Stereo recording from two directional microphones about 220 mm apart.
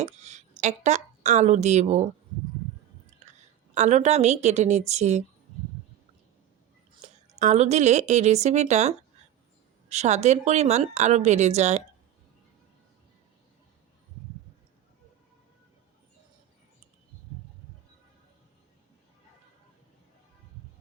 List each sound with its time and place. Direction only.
0.0 s a woman's voice: 30° right (ahead or behind)
3.2 s a sound: 30° right (ahead or behind)
3.8 s a woman's voice: 30° right (ahead or behind)
7.0 s a woman's voice: 30° right (ahead or behind)